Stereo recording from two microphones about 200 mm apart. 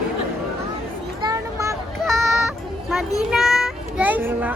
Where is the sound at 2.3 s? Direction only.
Centre (ahead or behind).